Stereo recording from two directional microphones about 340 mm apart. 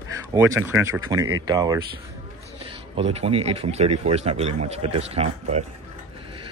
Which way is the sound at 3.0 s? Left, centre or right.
Centre.